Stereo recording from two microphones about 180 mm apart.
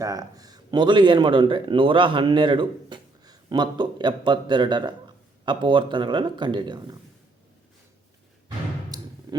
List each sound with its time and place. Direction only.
0.0 s speech: 20° right (ahead or behind)
8.4 s music: 25° right (ahead or behind)